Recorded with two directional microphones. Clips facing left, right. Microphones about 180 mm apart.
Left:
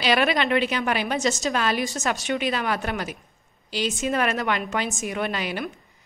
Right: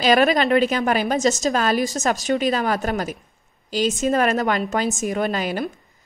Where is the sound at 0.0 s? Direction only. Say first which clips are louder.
Right 5 dB; 45° right (ahead or behind).